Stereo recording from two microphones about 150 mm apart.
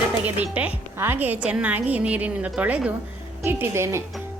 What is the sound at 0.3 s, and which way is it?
Speech, 10° right (ahead or behind).